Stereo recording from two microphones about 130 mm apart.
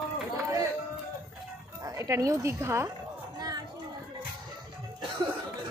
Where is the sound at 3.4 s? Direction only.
30° right (ahead or behind).